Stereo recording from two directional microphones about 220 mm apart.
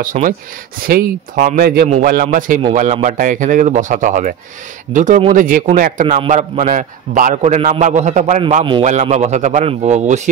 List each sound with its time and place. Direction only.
0.0 s a man's voice: 35° right (ahead or behind)